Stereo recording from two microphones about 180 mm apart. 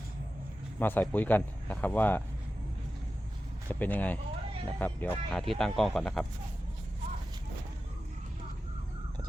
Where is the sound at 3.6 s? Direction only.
10° left (ahead or behind).